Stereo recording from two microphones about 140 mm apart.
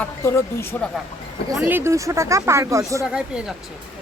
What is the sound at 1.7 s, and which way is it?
Speech, 15° right (ahead or behind).